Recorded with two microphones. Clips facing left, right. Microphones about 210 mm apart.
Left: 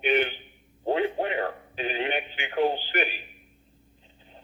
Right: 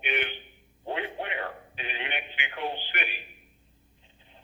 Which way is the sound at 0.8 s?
40° left (ahead or behind).